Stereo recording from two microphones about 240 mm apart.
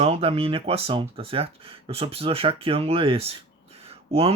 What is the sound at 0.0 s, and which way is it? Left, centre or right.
Speech, right.